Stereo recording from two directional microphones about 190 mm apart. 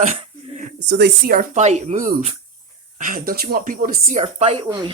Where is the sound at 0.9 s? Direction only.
60° right (ahead or behind).